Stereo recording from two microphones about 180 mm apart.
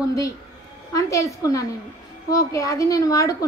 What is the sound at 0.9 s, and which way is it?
A woman's voice, 20° left (ahead or behind).